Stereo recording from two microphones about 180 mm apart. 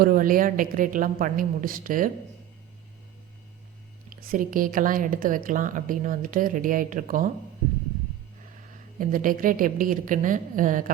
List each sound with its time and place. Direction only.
0.0 s a woman's voice: 50° right (ahead or behind)
4.3 s a woman's voice: 50° right (ahead or behind)
9.0 s a woman's voice: 50° right (ahead or behind)